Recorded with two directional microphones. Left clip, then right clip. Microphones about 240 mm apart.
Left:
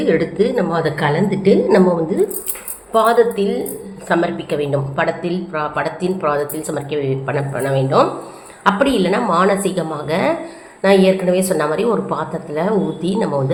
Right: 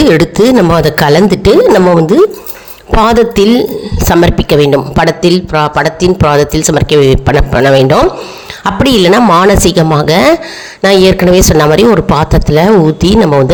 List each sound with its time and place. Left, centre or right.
0.1 s a woman's voice: right
3.0 s a woman's voice: right